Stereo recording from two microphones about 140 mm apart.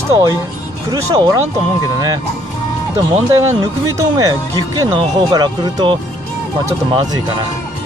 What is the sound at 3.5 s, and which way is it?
Speech, 25° right (ahead or behind).